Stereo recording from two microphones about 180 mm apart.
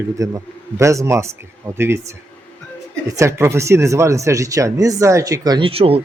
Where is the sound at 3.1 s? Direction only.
15° right (ahead or behind); by 6.0 s 30° right (ahead or behind).